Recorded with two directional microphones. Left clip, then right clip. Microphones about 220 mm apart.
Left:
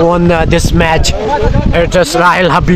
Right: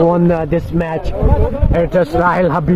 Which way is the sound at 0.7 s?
40° left (ahead or behind).